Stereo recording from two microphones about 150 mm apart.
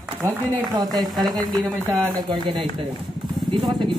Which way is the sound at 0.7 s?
25° right (ahead or behind).